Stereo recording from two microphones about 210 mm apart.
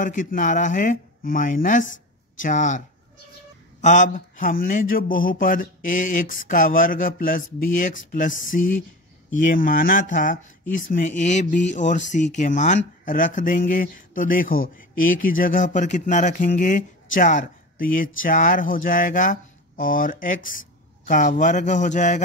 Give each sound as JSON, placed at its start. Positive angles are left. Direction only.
{"t": 0.0, "sound": "speech", "side_deg": 40}
{"t": 3.8, "sound": "speech", "side_deg": 35}